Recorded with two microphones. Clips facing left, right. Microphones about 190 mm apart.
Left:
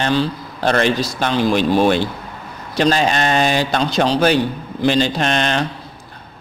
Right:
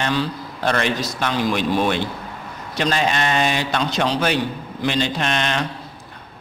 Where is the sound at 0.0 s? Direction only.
30° left (ahead or behind).